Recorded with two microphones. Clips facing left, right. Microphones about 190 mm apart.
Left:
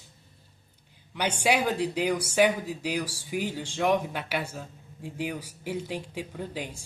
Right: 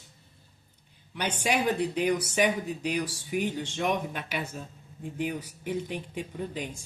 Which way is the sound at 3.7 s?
65° left (ahead or behind).